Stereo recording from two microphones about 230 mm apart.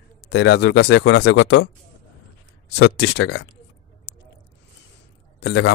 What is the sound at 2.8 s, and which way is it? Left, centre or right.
Speech, left.